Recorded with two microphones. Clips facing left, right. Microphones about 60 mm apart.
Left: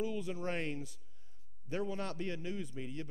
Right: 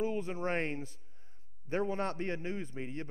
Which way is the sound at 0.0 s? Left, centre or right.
Right.